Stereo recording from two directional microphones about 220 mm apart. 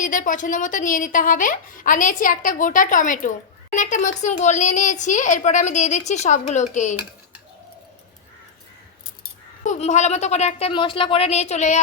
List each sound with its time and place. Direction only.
0.0 s a woman's voice: 35° left (ahead or behind)
9.6 s a woman's voice: 30° left (ahead or behind)